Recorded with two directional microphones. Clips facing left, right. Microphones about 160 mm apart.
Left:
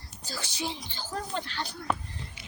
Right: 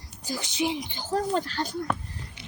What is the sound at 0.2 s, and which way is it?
Speech, 15° right (ahead or behind).